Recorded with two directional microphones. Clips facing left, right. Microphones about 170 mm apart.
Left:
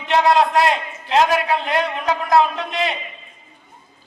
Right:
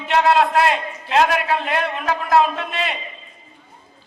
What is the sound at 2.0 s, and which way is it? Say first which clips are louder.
Speech: even; 15° left (ahead or behind).